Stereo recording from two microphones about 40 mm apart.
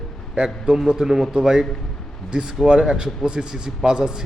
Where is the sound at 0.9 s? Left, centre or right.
Centre.